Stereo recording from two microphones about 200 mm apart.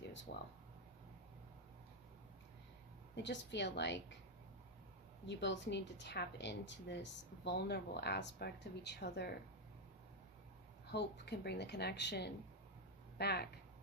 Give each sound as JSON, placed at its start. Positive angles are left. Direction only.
{"t": 0.3, "sound": "speech", "side_deg": 60}
{"t": 3.2, "sound": "speech", "side_deg": 60}
{"t": 5.2, "sound": "speech", "side_deg": 65}
{"t": 10.9, "sound": "speech", "side_deg": 55}